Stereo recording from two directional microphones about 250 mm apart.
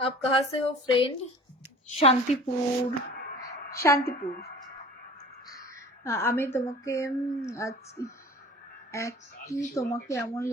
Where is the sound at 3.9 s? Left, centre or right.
Left.